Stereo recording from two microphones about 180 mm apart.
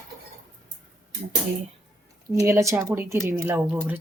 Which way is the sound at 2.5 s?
15° right (ahead or behind).